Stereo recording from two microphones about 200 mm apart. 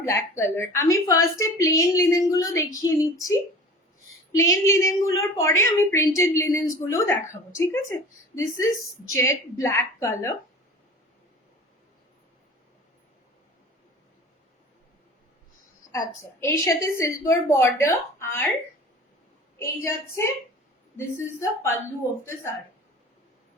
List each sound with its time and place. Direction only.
0.0 s a woman's voice: 15° left (ahead or behind)
4.4 s a woman's voice: 15° left (ahead or behind)
15.9 s a woman's voice: 15° left (ahead or behind)
19.5 s a woman's voice: 15° left (ahead or behind)